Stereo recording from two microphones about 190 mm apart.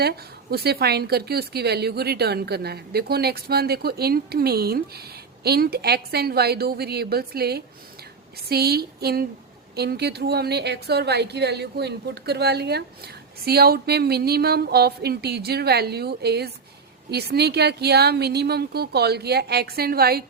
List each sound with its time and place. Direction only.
0.5 s a woman's voice: 55° right (ahead or behind)